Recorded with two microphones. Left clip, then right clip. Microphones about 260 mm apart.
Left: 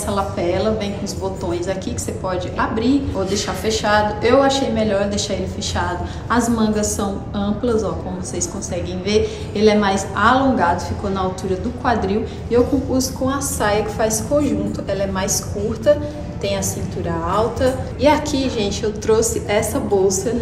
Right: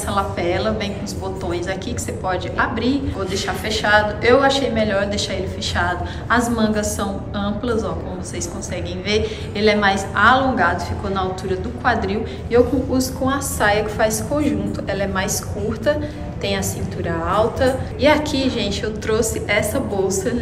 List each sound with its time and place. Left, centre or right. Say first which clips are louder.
0.1 s a woman's voice: even; centre
2.2 s a woman's voice: right 1 dB; centre
9.1 s a woman's voice: left 2 dB; centre
12.1 s a woman's voice: even; centre
17.1 s a woman's voice: right 1 dB; centre